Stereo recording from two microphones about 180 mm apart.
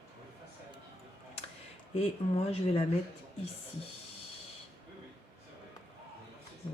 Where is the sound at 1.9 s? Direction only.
35° left (ahead or behind).